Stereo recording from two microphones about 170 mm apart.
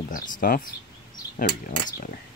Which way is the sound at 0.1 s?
55° left (ahead or behind).